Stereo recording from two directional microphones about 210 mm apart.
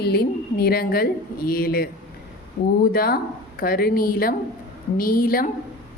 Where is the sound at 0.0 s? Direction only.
50° left (ahead or behind).